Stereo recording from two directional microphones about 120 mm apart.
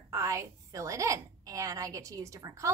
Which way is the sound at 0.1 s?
25° right (ahead or behind).